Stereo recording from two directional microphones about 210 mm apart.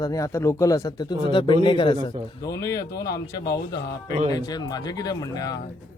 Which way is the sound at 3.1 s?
50° left (ahead or behind).